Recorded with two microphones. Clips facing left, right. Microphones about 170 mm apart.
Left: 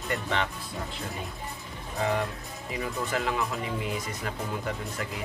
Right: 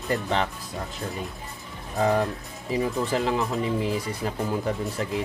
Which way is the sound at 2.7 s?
30° right (ahead or behind).